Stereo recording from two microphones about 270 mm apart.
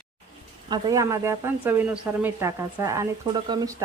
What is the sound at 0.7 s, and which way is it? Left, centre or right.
Speech, centre.